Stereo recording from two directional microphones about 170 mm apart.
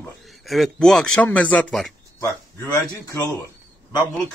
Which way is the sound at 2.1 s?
15° left (ahead or behind).